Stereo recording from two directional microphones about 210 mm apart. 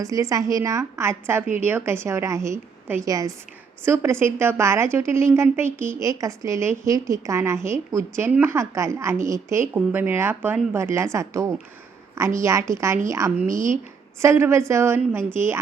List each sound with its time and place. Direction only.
0.0 s a woman's voice: 15° right (ahead or behind)
13.5 s a woman's voice: 40° right (ahead or behind)
14.2 s a woman's voice: 10° right (ahead or behind)